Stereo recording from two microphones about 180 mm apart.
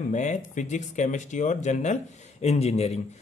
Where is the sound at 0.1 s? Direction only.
45° left (ahead or behind).